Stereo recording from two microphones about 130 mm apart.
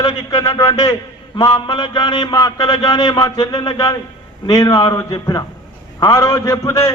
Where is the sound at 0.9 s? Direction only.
35° left (ahead or behind).